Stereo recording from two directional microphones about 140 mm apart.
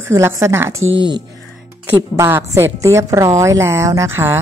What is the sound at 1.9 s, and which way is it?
A woman's voice, 15° right (ahead or behind).